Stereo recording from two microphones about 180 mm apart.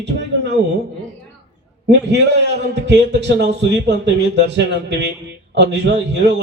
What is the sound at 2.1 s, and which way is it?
A man's voice, 70° right (ahead or behind).